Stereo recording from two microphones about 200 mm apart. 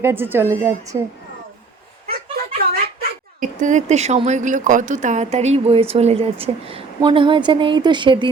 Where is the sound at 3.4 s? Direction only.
40° right (ahead or behind).